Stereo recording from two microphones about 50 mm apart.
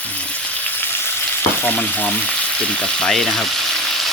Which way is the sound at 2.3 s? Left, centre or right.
Left.